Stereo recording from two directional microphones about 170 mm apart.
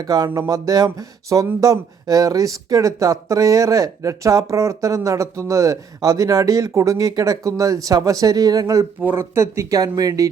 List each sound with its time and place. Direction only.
0.0 s speech: 20° right (ahead or behind)